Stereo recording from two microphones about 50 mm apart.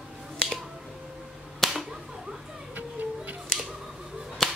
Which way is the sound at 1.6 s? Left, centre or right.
Centre.